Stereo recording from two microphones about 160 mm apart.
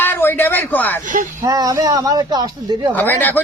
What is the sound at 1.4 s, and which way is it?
Speech, 20° right (ahead or behind).